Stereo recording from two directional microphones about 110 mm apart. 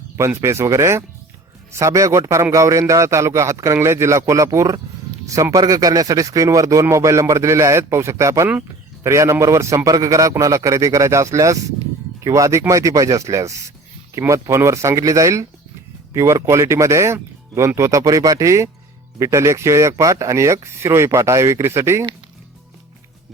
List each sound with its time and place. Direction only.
0.2 s a man's voice: 25° right (ahead or behind)